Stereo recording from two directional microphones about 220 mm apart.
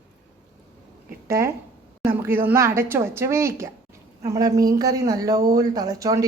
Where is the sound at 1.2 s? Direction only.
10° right (ahead or behind).